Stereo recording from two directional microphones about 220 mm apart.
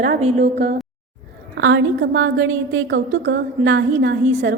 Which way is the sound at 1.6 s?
55° right (ahead or behind).